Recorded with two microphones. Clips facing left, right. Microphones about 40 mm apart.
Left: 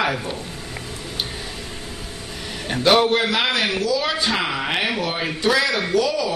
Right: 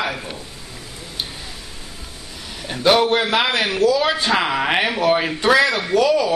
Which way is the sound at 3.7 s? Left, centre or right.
Right.